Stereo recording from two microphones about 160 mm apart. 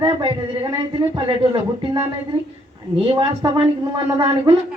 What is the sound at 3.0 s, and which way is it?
A man's voice, 35° right (ahead or behind).